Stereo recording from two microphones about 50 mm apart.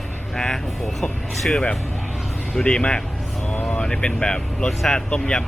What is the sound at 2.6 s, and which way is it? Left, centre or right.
A man's voice, left.